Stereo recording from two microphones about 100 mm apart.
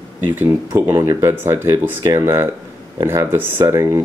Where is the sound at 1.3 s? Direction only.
20° right (ahead or behind).